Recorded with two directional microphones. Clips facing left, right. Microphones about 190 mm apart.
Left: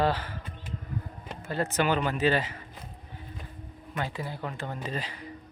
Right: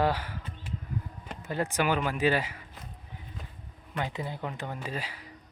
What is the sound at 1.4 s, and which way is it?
Speech, 15° right (ahead or behind).